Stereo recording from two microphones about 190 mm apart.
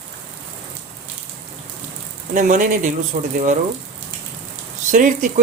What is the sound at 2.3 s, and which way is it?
Speech, 45° right (ahead or behind).